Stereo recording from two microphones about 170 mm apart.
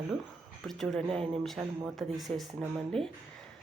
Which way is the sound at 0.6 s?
Centre (ahead or behind).